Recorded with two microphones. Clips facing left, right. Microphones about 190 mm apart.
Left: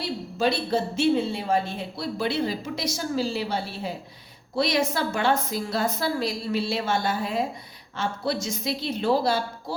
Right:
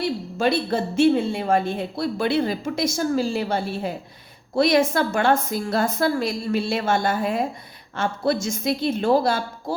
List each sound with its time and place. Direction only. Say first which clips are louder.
0.0 s a woman's voice: right 3 dB; 55° right (ahead or behind)